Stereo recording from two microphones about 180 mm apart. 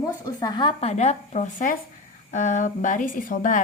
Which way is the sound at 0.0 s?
20° left (ahead or behind).